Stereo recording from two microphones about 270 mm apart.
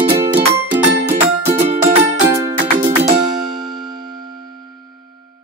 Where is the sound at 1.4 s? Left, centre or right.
Right.